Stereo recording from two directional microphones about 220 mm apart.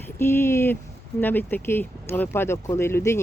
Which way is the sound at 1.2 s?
10° left (ahead or behind).